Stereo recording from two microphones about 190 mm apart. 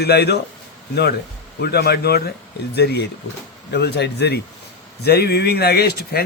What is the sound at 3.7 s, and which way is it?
Speech, 60° left (ahead or behind).